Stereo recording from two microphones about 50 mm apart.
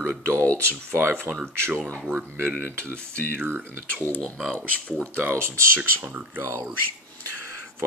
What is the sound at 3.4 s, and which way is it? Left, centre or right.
Speech, right.